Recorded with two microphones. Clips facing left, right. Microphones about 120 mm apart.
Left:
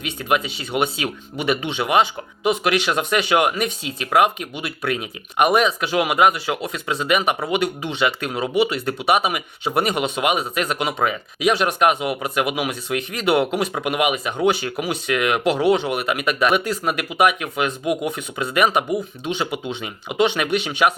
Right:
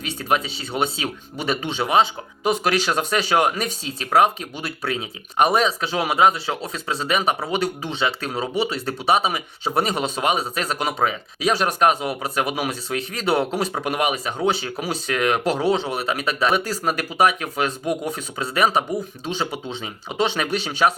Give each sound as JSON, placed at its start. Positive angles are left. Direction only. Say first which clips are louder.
{"t": 0.0, "sound": "speech", "louder": "left 1 dB", "side_deg": -35}